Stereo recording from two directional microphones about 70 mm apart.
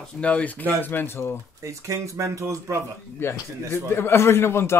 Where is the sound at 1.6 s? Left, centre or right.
Right.